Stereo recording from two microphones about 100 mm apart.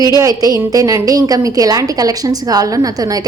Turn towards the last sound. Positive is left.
turn(degrees=-40)  # may be behind; listen again after turning